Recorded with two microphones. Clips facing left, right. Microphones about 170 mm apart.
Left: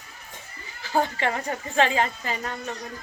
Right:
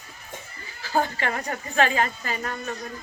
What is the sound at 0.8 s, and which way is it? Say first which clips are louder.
Speech: left 1 dB; 20° left (ahead or behind).